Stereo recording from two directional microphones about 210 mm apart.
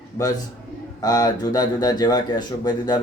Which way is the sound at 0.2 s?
15° left (ahead or behind).